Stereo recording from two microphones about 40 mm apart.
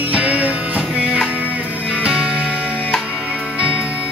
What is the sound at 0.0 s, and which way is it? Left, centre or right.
Music, right.